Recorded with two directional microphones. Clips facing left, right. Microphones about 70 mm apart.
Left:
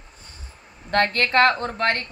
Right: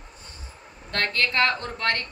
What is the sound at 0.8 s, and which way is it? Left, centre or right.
Speech, left.